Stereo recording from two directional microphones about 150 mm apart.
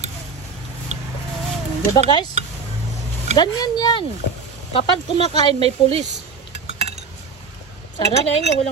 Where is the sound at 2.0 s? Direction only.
30° left (ahead or behind).